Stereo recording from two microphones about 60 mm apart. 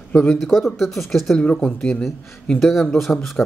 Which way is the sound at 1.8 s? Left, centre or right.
Centre.